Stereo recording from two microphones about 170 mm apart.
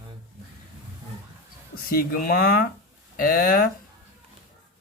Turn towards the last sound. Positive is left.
turn(degrees=55)  # may be behind; listen again after turning